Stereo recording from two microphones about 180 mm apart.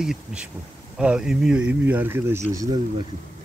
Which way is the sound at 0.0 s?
5° right (ahead or behind).